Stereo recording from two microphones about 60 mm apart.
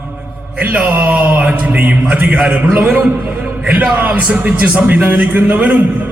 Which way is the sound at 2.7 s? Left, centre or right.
Right.